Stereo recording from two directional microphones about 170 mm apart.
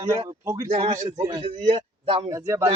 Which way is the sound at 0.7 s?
35° right (ahead or behind).